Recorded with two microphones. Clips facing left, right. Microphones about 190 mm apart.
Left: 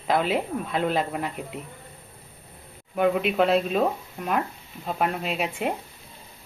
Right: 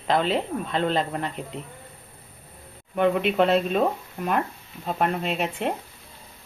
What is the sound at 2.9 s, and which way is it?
Speech, centre (ahead or behind).